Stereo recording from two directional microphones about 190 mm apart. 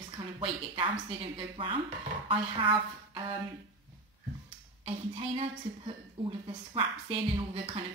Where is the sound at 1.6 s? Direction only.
30° right (ahead or behind).